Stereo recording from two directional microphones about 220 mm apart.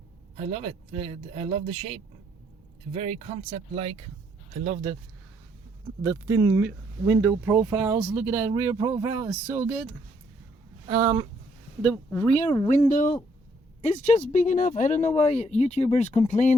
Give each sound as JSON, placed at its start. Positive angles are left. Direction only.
{"t": 0.3, "sound": "speech", "side_deg": -25}
{"t": 6.0, "sound": "speech", "side_deg": -15}
{"t": 10.8, "sound": "speech", "side_deg": -20}
{"t": 11.8, "sound": "speech", "side_deg": 10}
{"t": 12.5, "sound": "speech", "side_deg": 30}